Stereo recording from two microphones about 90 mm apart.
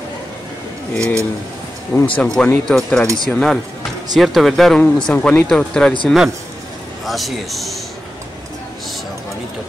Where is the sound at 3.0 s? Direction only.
40° right (ahead or behind).